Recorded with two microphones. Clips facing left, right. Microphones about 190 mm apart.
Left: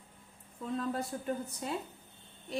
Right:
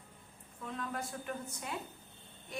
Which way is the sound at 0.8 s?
30° left (ahead or behind).